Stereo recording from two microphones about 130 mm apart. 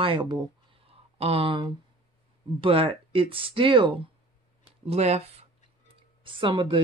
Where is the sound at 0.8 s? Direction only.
45° right (ahead or behind).